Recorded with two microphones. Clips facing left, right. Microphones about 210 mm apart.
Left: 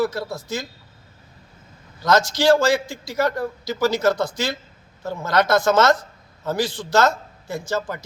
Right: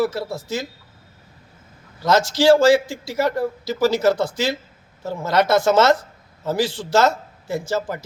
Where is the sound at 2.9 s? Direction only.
5° right (ahead or behind).